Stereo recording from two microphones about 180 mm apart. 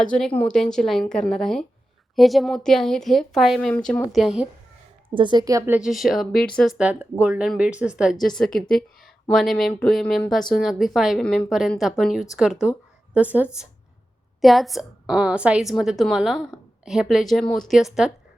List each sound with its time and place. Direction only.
0.0 s speech: 5° left (ahead or behind)
5.1 s a woman's voice: 25° right (ahead or behind); by 18.1 s 5° right (ahead or behind)